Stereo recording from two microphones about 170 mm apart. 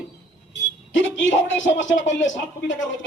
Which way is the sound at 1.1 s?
90° left.